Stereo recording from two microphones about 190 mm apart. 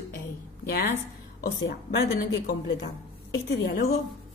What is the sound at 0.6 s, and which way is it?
A woman's voice, 55° left (ahead or behind).